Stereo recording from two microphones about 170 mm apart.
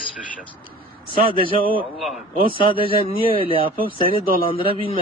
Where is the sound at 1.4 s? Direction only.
60° right (ahead or behind).